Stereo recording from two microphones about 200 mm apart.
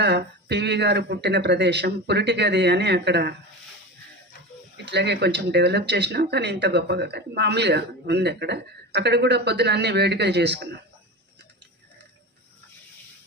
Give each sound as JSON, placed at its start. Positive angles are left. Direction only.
{"t": 0.0, "sound": "speech", "side_deg": -55}
{"t": 4.9, "sound": "speech", "side_deg": -60}